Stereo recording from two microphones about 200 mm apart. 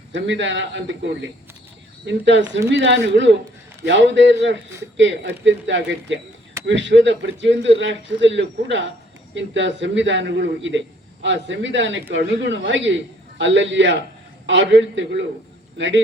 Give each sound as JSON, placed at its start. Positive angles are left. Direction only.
{"t": 0.1, "sound": "a man's voice", "side_deg": -65}